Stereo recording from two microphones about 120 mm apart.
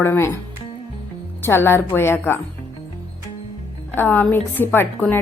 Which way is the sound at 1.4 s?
20° left (ahead or behind).